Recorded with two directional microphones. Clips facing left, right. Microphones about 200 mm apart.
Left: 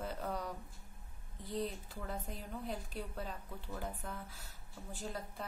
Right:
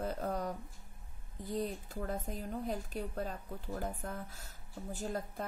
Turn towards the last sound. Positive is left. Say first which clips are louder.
# right 5 dB
turn(degrees=-45)  # may be behind; listen again after turning